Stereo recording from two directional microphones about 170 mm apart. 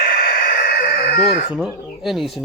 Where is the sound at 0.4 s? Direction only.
65° left (ahead or behind).